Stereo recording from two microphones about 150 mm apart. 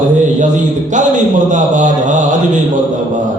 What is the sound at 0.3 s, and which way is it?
A man's voice, 55° right (ahead or behind).